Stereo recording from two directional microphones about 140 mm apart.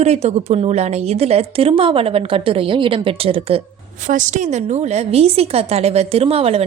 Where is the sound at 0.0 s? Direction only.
50° right (ahead or behind).